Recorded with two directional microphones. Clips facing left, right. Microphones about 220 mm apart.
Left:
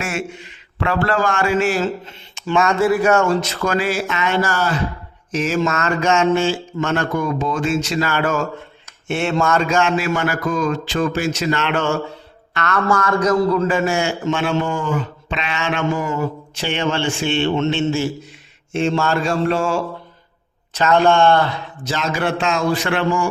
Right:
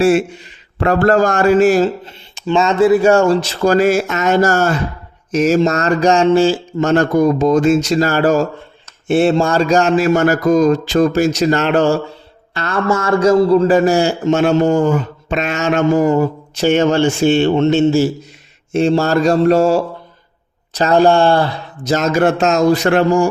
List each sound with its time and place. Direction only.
0.0 s a man's voice: 35° right (ahead or behind)